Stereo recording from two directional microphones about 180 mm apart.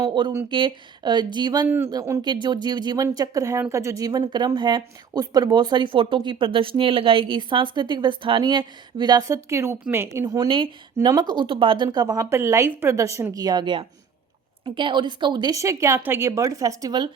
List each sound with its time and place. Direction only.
0.0 s speech: 25° right (ahead or behind)
1.6 s speech: 10° right (ahead or behind)